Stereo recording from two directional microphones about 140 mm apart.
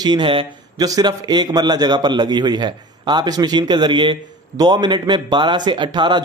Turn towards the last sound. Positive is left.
turn(degrees=-35)  # may be behind; listen again after turning